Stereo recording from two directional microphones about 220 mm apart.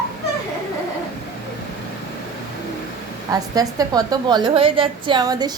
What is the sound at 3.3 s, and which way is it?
A woman's voice, 15° right (ahead or behind).